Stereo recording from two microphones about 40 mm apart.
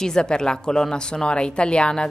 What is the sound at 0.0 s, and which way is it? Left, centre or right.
A woman's voice, centre.